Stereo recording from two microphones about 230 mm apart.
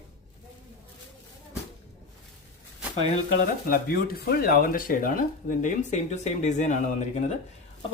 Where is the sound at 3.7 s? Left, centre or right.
Left.